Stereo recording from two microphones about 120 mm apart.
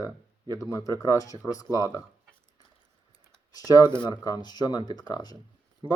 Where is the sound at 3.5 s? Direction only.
30° left (ahead or behind).